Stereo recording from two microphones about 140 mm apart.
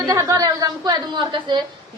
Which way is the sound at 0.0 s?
25° right (ahead or behind).